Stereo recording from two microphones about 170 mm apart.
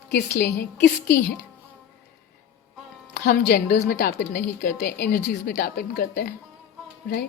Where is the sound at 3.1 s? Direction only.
75° left (ahead or behind).